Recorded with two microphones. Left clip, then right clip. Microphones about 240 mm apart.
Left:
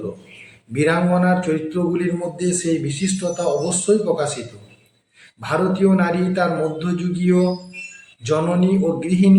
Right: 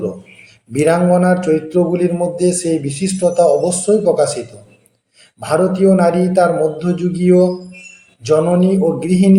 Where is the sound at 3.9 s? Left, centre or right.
Centre.